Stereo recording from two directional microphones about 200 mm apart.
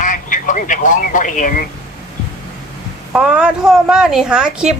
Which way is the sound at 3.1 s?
5° right (ahead or behind).